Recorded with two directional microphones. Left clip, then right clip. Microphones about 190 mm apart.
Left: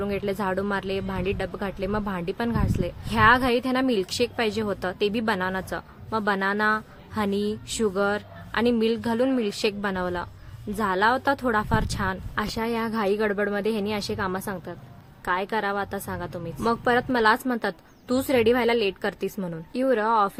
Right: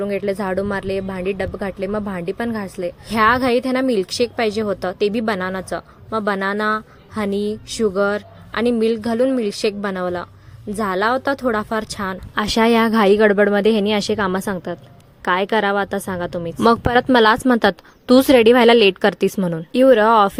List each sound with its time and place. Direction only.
0.0 s speech: 15° right (ahead or behind)
12.3 s a woman's voice: 50° right (ahead or behind)